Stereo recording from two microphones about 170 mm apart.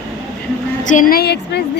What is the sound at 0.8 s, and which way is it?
Speech, 55° left (ahead or behind).